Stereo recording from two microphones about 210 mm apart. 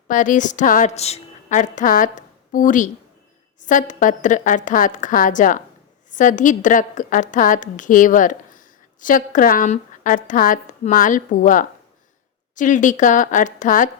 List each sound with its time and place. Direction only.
0.1 s a woman's voice: 35° left (ahead or behind)